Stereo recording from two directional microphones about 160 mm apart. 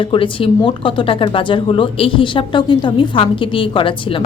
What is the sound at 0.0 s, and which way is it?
Speech, 35° left (ahead or behind).